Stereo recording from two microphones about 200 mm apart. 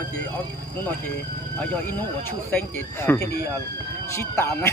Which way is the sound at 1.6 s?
10° left (ahead or behind).